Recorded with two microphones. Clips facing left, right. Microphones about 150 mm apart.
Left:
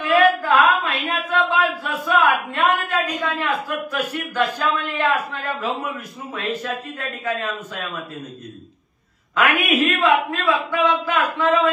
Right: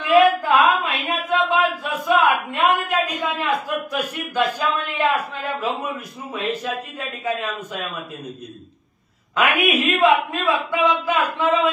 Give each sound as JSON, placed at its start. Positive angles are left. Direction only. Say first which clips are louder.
{"t": 0.0, "sound": "a sound", "louder": "right 2 dB", "side_deg": -15}
{"t": 6.3, "sound": "a man's voice", "louder": "right 1 dB", "side_deg": -15}
{"t": 9.3, "sound": "a man's voice", "louder": "even", "side_deg": -15}